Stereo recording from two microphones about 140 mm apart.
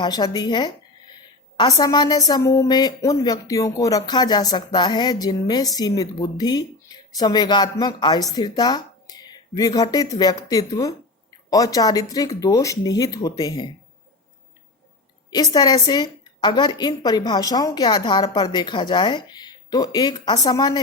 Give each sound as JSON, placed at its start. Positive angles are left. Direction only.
{"t": 0.0, "sound": "a woman's voice", "side_deg": 30}
{"t": 15.5, "sound": "a woman's voice", "side_deg": 30}